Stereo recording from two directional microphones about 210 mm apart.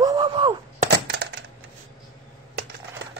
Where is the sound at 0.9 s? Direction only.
50° right (ahead or behind).